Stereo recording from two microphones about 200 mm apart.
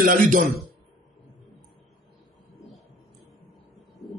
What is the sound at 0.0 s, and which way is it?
Speech, 45° right (ahead or behind).